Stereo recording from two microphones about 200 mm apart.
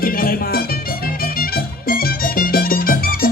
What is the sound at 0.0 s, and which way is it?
Music, 45° left (ahead or behind).